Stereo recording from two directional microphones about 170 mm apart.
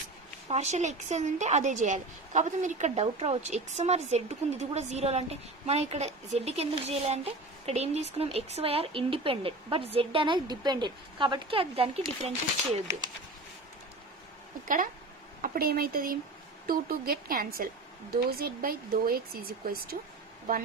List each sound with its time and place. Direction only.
0.4 s speech: 40° right (ahead or behind)
15.4 s speech: 60° right (ahead or behind)